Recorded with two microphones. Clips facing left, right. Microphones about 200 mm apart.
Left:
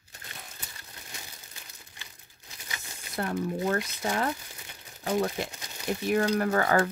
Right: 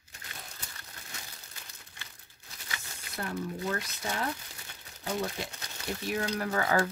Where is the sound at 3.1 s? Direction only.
50° left (ahead or behind).